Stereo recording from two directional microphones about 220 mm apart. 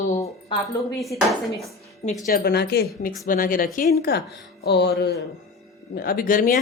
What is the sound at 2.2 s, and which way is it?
Speech, 45° left (ahead or behind).